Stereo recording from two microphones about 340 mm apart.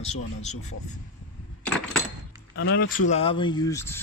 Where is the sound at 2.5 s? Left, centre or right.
Left.